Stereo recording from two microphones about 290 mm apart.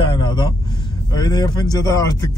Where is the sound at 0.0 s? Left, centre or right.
Centre.